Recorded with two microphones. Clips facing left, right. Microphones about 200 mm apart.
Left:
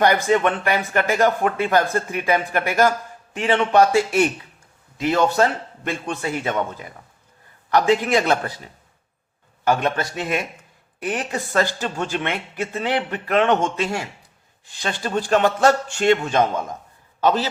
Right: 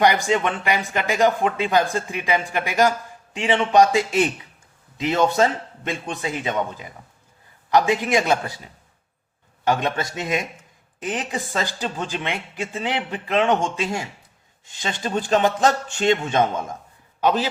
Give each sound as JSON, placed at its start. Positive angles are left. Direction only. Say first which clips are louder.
{"t": 0.0, "sound": "a man's voice", "louder": "left 2 dB", "side_deg": -15}
{"t": 9.6, "sound": "a man's voice", "louder": "left 2 dB", "side_deg": -20}